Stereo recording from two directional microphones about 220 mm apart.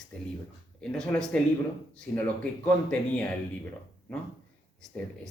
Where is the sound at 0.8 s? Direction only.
5° left (ahead or behind).